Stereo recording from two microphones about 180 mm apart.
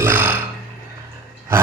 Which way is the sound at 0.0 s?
10° right (ahead or behind).